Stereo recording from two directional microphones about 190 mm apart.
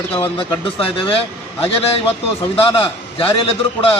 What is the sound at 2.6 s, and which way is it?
A man's voice, 30° left (ahead or behind).